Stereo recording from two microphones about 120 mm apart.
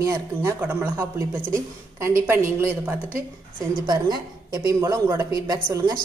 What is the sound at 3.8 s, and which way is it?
Speech, 35° right (ahead or behind).